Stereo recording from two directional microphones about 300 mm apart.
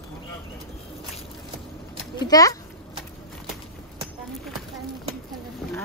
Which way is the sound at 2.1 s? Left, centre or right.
Centre.